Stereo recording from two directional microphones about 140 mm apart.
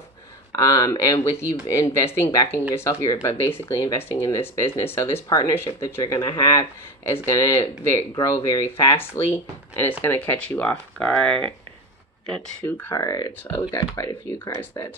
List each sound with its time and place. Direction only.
0.5 s speech: 25° left (ahead or behind)
3.4 s speech: 15° left (ahead or behind)
13.0 s speech: 25° left (ahead or behind)